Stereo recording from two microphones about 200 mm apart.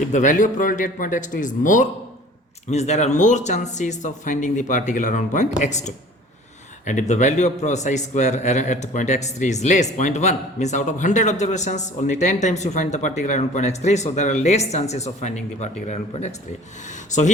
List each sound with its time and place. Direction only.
0.1 s a man's voice: 40° left (ahead or behind)